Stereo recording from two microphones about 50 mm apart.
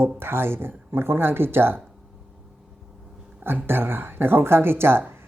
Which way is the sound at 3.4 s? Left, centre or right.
Right.